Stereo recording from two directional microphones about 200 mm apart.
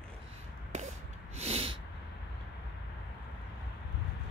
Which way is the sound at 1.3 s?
30° right (ahead or behind).